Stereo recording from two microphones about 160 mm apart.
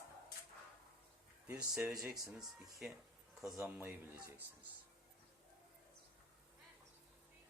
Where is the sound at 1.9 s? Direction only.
5° right (ahead or behind).